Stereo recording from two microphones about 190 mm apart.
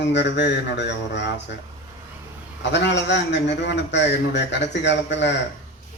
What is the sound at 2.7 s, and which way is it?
A man's voice, 65° left (ahead or behind).